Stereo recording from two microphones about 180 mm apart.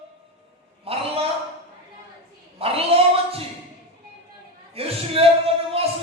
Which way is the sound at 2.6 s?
30° right (ahead or behind).